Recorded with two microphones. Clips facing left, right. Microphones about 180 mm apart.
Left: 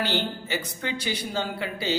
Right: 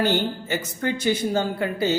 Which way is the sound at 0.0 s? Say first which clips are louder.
Right 5 dB; 45° right (ahead or behind).